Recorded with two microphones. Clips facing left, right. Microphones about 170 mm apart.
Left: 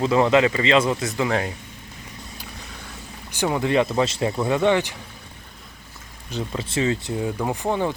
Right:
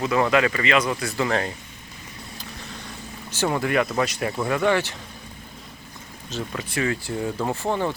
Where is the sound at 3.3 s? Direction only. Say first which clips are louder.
Left 1 dB; 15° left (ahead or behind).